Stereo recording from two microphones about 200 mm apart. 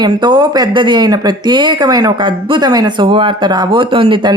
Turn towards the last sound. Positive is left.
turn(degrees=-25)  # may be behind; listen again after turning